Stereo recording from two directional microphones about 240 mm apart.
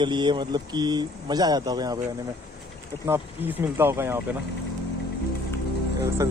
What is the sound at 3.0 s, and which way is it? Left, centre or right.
Speech, centre.